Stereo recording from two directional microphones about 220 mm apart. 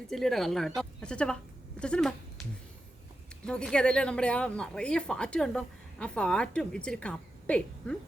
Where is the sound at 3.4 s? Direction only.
5° left (ahead or behind).